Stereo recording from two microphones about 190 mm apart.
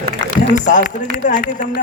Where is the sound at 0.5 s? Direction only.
40° left (ahead or behind).